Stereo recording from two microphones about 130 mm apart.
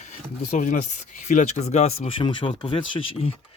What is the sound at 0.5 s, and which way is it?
Speech, 85° left.